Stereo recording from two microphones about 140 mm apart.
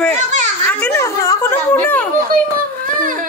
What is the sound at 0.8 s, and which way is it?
Speech, 20° left (ahead or behind).